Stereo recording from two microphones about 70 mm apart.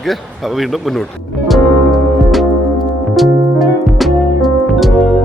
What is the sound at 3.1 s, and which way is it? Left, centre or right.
Music, centre.